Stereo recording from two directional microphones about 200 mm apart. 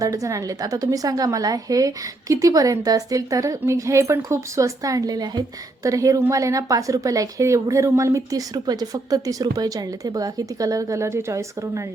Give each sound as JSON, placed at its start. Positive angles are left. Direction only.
{"t": 0.0, "sound": "a woman's voice", "side_deg": -15}